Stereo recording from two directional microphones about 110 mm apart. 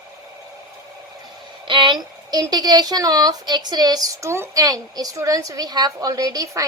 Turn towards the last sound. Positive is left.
turn(degrees=-30)  # may be behind; listen again after turning